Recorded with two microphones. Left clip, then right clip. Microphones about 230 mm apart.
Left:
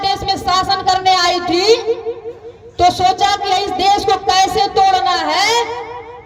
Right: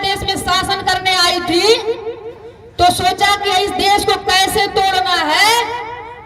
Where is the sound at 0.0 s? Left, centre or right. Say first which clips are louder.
Left 1 dB; right.